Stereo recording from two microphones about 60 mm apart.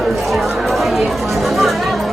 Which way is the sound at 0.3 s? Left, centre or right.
Centre.